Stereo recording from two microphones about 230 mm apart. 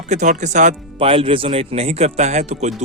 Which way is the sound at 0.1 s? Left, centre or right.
Right.